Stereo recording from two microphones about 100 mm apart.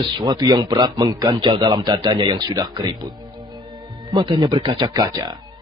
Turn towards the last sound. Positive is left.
turn(degrees=-40)  # may be behind; listen again after turning